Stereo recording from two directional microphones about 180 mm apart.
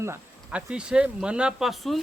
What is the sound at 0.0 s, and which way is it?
Speech, 10° right (ahead or behind).